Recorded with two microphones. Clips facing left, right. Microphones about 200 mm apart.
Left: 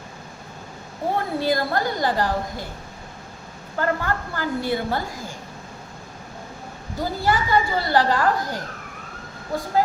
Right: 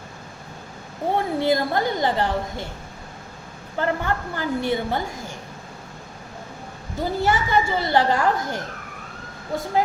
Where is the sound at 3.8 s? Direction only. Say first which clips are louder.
Even; 20° right (ahead or behind).